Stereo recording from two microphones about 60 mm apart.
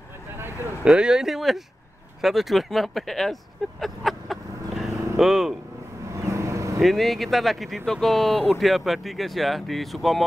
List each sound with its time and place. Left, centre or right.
0.8 s speech: centre
3.8 s vehicle: centre
6.1 s vehicle: right
6.8 s speech: centre